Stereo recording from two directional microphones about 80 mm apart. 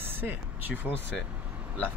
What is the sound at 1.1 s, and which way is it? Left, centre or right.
Speech, centre.